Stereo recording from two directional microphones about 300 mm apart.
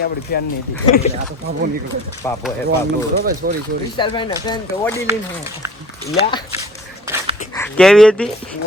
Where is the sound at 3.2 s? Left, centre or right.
Right.